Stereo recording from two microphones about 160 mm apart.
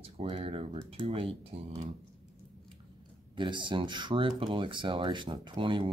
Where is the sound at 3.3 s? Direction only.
30° right (ahead or behind).